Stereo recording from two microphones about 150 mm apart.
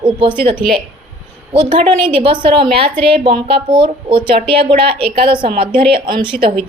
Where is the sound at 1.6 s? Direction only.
35° right (ahead or behind).